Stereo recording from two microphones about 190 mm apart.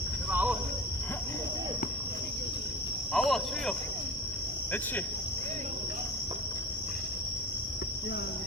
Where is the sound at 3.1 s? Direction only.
Centre (ahead or behind).